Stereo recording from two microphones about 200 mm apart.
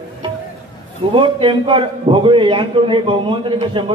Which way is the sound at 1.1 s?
25° right (ahead or behind).